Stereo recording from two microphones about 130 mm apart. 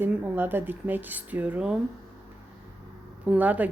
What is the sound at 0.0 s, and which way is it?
A woman's voice, 15° right (ahead or behind).